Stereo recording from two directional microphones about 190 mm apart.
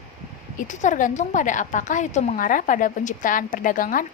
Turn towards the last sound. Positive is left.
turn(degrees=45)  # may be behind; listen again after turning